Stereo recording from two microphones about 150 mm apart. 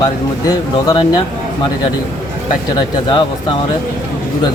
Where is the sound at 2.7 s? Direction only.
30° left (ahead or behind).